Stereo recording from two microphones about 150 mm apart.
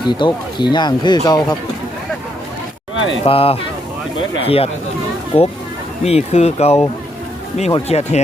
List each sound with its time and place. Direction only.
0.0 s speech: 30° left (ahead or behind)
3.2 s speech: 40° left (ahead or behind)